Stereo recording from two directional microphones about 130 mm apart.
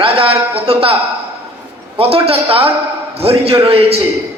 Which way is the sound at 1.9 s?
50° right (ahead or behind).